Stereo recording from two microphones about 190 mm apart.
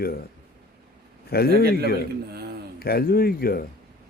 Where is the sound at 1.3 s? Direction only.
55° left (ahead or behind).